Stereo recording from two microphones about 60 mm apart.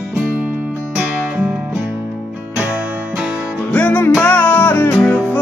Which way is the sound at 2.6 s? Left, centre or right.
Centre.